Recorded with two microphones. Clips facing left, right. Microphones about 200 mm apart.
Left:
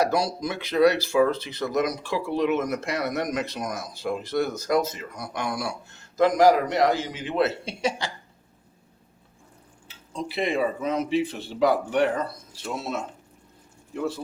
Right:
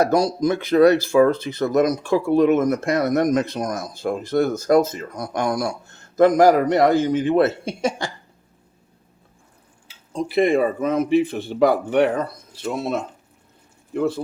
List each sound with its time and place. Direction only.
0.0 s speech: 45° right (ahead or behind)
10.1 s speech: 50° right (ahead or behind)